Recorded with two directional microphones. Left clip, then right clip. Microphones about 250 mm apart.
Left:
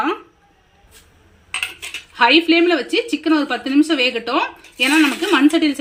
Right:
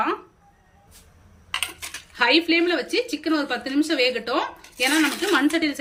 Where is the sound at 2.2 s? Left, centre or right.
Centre.